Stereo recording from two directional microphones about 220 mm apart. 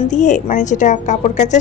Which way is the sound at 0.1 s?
35° left (ahead or behind).